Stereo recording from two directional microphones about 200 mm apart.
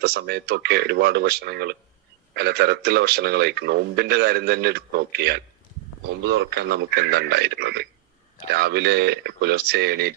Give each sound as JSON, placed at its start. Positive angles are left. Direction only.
{"t": 0.0, "sound": "speech", "side_deg": -50}